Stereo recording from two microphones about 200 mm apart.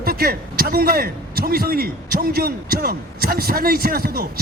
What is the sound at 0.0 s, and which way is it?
Speech, 50° right (ahead or behind).